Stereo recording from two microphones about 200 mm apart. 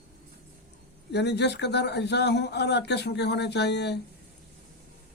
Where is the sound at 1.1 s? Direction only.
55° left (ahead or behind).